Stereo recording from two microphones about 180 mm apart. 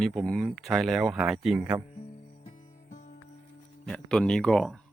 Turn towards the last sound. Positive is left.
turn(degrees=5)  # may be behind; listen again after turning